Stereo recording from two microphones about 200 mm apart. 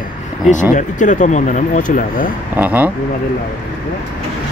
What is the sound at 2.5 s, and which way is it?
Speech, 10° right (ahead or behind).